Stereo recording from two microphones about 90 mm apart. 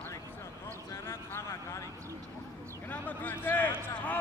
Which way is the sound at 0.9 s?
30° left (ahead or behind).